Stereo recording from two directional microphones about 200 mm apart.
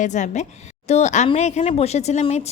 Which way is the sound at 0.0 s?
35° left (ahead or behind).